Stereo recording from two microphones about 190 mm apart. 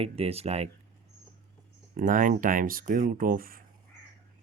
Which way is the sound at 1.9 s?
45° right (ahead or behind).